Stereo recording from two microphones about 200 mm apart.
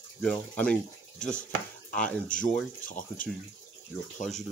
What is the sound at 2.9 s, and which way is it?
Speech, 40° left (ahead or behind).